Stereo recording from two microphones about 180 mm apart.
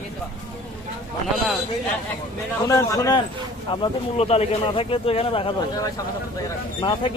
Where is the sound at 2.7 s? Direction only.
20° left (ahead or behind).